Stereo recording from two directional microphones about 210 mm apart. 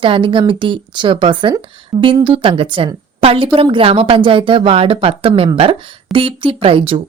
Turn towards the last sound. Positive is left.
turn(degrees=-25)  # may be behind; listen again after turning